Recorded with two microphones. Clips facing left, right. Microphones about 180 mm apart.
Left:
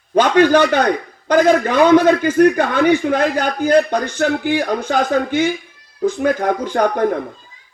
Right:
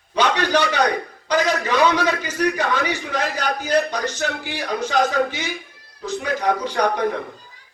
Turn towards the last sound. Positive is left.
turn(degrees=50)  # may be behind; listen again after turning